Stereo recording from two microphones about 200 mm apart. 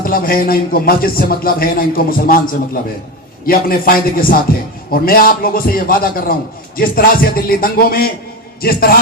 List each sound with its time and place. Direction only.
0.0 s speech: 45° left (ahead or behind)